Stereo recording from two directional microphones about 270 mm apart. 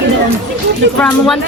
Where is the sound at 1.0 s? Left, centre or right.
Centre.